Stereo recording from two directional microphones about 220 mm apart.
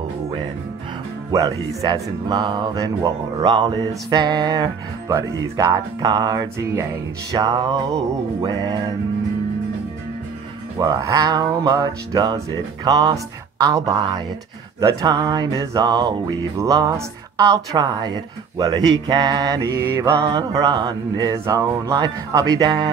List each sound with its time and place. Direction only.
1.3 s music: 15° right (ahead or behind)
10.8 s music: 15° right (ahead or behind)